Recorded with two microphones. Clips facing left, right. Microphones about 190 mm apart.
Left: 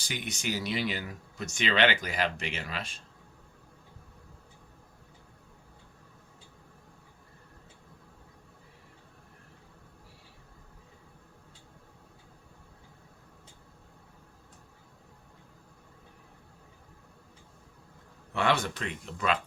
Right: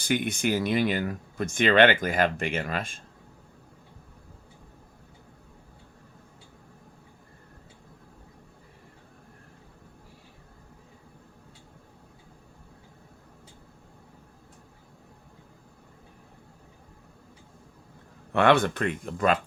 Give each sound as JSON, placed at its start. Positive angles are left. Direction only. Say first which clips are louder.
{"t": 0.0, "sound": "speech", "louder": "right 10 dB", "side_deg": -55}
{"t": 18.3, "sound": "speech", "louder": "right 7 dB", "side_deg": -60}